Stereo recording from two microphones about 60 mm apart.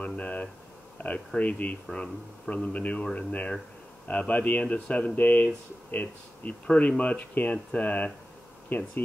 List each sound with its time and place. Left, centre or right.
0.0 s a sound: left
1.0 s speech: left
1.9 s speech: centre
2.5 s speech: left